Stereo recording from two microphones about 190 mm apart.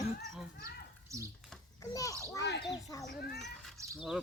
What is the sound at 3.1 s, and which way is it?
Speech, 50° left (ahead or behind).